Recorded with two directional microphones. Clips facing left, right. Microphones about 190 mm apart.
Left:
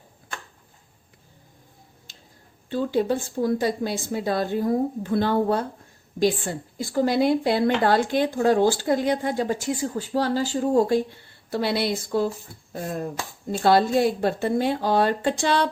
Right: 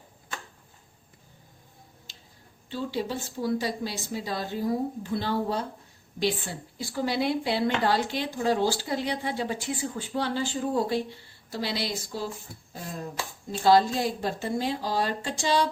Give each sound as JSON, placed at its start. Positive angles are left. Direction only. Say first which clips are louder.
{"t": 2.6, "sound": "speech", "louder": "left 8 dB", "side_deg": 50}